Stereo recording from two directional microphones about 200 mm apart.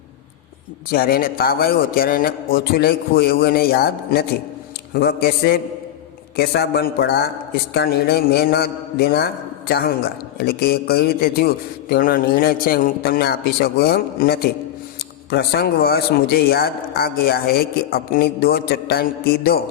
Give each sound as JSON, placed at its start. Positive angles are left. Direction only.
{"t": 0.9, "sound": "a man's voice", "side_deg": 50}